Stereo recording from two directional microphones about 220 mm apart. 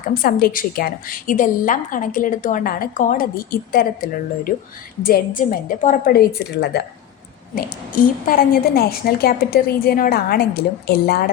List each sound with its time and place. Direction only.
0.1 s a woman's voice: 40° left (ahead or behind)
5.0 s a woman's voice: 40° left (ahead or behind)